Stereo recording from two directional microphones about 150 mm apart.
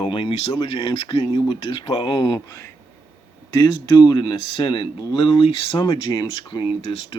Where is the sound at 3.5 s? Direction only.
30° left (ahead or behind).